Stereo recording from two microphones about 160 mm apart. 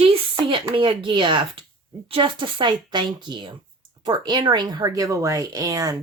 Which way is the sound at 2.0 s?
30° right (ahead or behind).